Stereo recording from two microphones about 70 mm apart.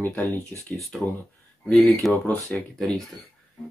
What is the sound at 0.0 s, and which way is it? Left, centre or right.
Speech, left.